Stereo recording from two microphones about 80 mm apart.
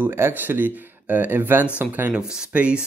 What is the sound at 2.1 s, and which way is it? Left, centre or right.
Speech, centre.